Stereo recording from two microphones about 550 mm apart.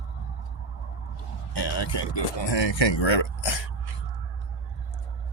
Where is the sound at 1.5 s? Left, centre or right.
Left.